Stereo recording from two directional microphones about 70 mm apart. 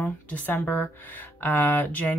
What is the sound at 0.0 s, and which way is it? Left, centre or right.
Speech, left.